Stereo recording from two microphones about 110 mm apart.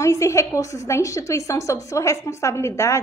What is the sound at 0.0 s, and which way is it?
A woman's voice, 25° left (ahead or behind).